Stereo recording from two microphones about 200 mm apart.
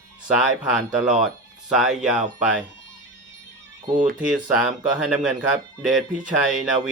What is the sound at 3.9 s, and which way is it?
Speech, 40° right (ahead or behind).